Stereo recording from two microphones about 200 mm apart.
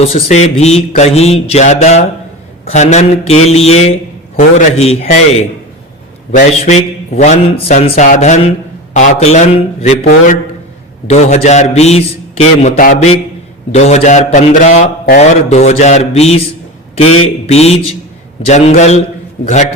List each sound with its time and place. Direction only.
0.0 s speech: 30° left (ahead or behind)
6.7 s speech: 35° left (ahead or behind)
10.0 s a man's voice: 50° left (ahead or behind)
11.1 s speech: 35° left (ahead or behind)
17.5 s speech: 30° left (ahead or behind)